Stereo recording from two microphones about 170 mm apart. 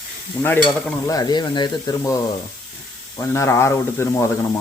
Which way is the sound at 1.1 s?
20° left (ahead or behind).